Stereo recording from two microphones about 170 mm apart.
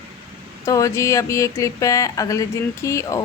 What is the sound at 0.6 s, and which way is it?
Speech, 20° left (ahead or behind).